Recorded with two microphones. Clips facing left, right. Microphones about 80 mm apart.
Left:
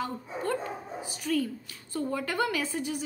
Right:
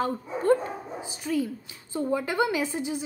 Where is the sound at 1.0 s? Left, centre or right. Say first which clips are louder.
Right 1 dB; right.